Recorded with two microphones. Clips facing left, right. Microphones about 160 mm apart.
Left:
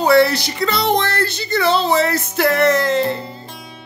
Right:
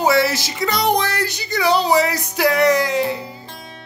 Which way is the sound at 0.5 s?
15° right (ahead or behind).